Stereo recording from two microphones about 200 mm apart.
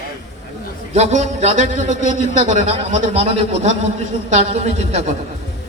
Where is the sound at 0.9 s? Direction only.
35° right (ahead or behind).